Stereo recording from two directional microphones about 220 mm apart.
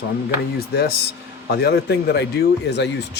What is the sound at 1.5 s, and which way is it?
A man's voice, 45° left (ahead or behind).